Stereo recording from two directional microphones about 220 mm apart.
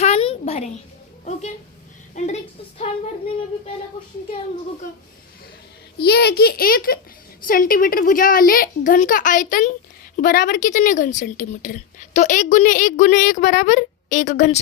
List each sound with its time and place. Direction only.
0.0 s a sound: 25° left (ahead or behind)
1.2 s a woman's voice: 30° left (ahead or behind)
6.1 s a child's voice: 45° left (ahead or behind)